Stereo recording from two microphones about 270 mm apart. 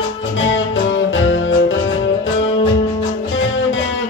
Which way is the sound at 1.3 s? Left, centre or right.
Left.